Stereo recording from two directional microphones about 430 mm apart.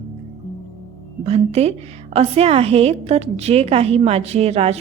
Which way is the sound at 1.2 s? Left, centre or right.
Centre.